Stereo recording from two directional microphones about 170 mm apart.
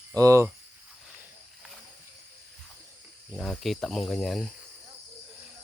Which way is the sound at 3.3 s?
Centre (ahead or behind).